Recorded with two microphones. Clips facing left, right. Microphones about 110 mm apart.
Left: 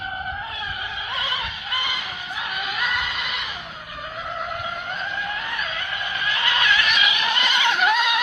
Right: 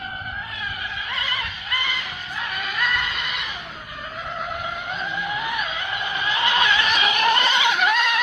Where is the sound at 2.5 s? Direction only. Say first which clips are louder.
Right 1 dB; 10° left (ahead or behind); by 7.4 s 45° right (ahead or behind).